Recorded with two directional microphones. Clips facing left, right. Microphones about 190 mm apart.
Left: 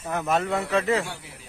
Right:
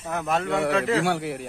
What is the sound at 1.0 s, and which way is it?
Speech, 70° right (ahead or behind).